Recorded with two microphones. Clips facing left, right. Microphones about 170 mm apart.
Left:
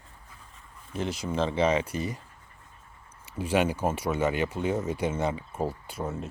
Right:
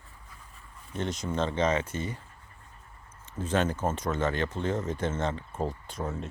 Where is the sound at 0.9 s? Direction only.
5° left (ahead or behind).